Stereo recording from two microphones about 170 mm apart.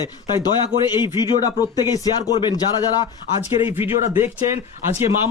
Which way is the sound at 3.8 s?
15° right (ahead or behind).